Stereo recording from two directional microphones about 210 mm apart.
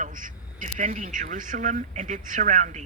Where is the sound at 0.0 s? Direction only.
40° right (ahead or behind).